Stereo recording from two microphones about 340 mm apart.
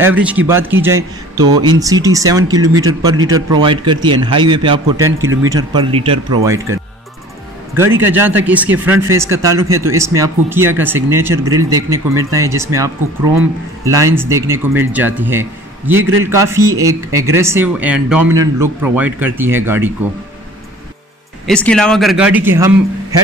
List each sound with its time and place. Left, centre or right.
0.0 s a man's voice: centre
2.7 s speech: right
3.3 s a man's voice: centre
16.0 s speech: right
16.3 s a man's voice: centre
21.5 s speech: centre